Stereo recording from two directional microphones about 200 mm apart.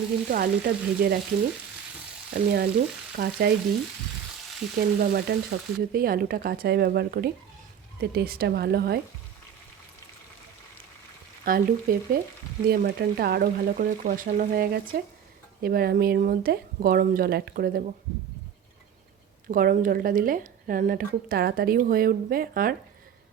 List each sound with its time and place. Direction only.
0.3 s a woman's voice: 50° right (ahead or behind)
2.3 s a woman's voice: 50° right (ahead or behind)
4.8 s a woman's voice: 50° right (ahead or behind)
11.4 s a woman's voice: 45° right (ahead or behind)
19.5 s a woman's voice: 45° right (ahead or behind)